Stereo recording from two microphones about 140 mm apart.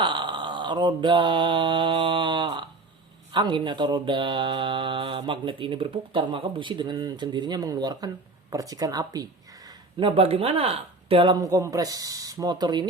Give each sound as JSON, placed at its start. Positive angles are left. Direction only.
{"t": 0.0, "sound": "mantra", "side_deg": -35}
{"t": 3.3, "sound": "speech", "side_deg": -35}
{"t": 9.6, "sound": "speech", "side_deg": -35}
{"t": 11.3, "sound": "speech", "side_deg": -25}